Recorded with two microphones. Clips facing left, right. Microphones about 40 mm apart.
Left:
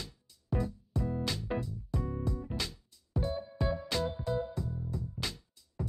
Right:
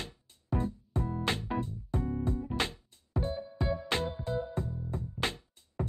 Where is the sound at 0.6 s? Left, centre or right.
Right.